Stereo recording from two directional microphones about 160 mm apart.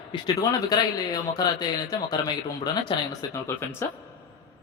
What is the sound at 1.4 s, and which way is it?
Speech, 25° left (ahead or behind).